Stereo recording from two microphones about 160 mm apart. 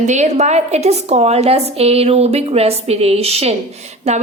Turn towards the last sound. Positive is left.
turn(degrees=-40)  # may be behind; listen again after turning